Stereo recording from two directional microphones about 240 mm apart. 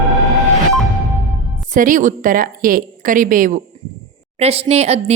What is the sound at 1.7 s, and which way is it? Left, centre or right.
A woman's voice, right.